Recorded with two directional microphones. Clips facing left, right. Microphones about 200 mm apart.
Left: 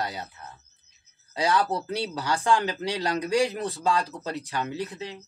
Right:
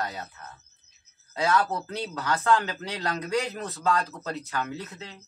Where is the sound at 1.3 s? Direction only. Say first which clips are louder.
Left 1 dB; 15° left (ahead or behind).